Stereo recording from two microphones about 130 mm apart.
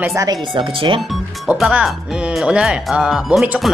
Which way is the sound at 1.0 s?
Centre (ahead or behind).